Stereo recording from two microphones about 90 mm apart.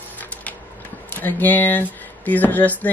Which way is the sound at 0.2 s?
15° left (ahead or behind).